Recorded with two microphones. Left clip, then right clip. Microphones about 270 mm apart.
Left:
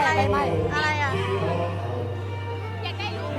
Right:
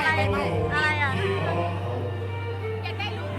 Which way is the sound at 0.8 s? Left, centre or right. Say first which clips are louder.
Right 2 dB; centre.